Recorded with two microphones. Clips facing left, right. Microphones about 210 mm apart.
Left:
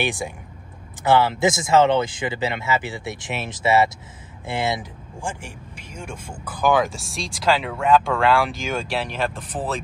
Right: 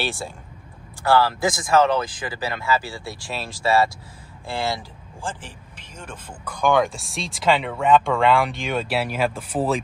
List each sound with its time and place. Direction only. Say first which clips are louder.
0.0 s speech: left 3 dB; 15° left (ahead or behind); by 9.8 s 10° right (ahead or behind)